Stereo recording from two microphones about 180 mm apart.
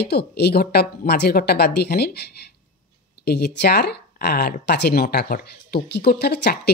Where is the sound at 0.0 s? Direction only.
65° left (ahead or behind).